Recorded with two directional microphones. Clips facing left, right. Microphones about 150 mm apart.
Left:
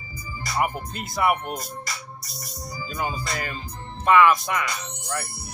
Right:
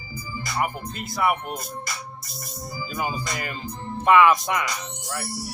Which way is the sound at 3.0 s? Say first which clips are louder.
Even; 15° right (ahead or behind).